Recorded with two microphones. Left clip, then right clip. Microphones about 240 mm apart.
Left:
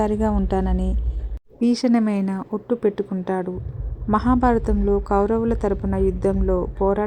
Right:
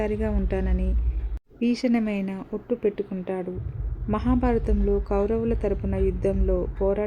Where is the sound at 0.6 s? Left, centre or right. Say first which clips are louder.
Left 6 dB; centre.